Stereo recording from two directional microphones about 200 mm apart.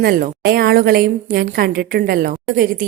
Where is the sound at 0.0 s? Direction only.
50° right (ahead or behind).